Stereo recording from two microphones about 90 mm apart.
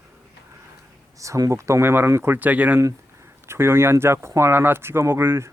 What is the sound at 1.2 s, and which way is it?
Speech, 35° right (ahead or behind).